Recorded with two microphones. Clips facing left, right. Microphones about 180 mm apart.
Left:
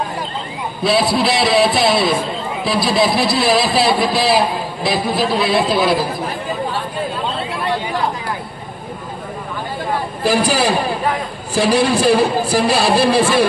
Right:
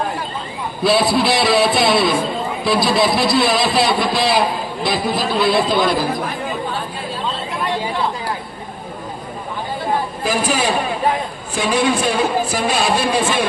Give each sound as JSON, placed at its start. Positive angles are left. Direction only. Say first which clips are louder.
{"t": 0.8, "sound": "a man's voice", "louder": "even", "side_deg": 0}
{"t": 10.2, "sound": "a man's voice", "louder": "left 5 dB", "side_deg": 35}